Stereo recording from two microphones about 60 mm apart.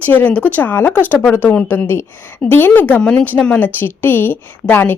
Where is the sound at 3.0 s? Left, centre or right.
Centre.